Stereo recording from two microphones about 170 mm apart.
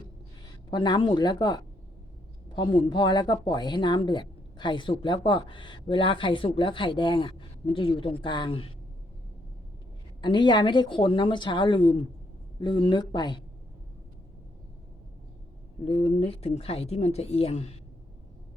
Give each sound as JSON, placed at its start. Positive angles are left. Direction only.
{"t": 0.7, "sound": "speech", "side_deg": 25}
{"t": 10.2, "sound": "speech", "side_deg": 25}
{"t": 15.8, "sound": "a woman's voice", "side_deg": 30}